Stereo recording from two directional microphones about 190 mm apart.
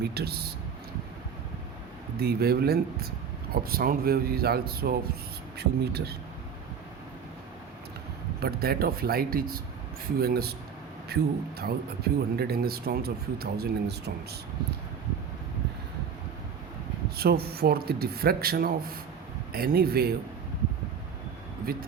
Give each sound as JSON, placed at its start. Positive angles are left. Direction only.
{"t": 0.0, "sound": "speech", "side_deg": -55}
{"t": 2.1, "sound": "speech", "side_deg": -55}
{"t": 8.4, "sound": "speech", "side_deg": -55}
{"t": 17.2, "sound": "speech", "side_deg": -55}
{"t": 21.7, "sound": "speech", "side_deg": -55}